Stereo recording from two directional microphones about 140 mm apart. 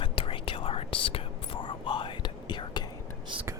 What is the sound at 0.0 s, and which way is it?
Whispering, 40° left (ahead or behind).